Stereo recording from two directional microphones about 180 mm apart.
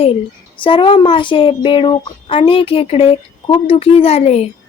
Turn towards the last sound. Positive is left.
turn(degrees=35)  # may be behind; listen again after turning